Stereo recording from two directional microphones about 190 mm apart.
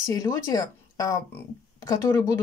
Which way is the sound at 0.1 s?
20° left (ahead or behind).